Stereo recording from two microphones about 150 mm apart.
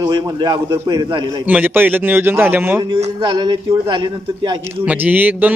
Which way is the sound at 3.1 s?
30° right (ahead or behind).